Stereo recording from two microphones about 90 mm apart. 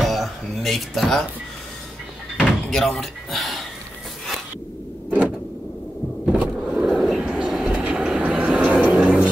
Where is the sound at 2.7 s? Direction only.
5° left (ahead or behind).